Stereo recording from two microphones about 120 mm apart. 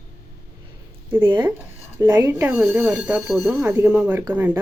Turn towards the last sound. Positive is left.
turn(degrees=-15)  # may be behind; listen again after turning